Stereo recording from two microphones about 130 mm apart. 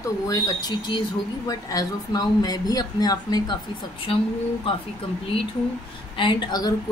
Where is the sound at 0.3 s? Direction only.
30° left (ahead or behind).